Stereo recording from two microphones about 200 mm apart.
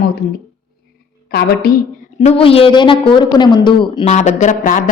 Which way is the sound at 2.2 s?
30° left (ahead or behind).